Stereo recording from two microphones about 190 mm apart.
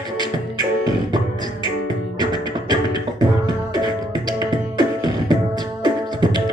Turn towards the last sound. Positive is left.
turn(degrees=-20)  # may be behind; listen again after turning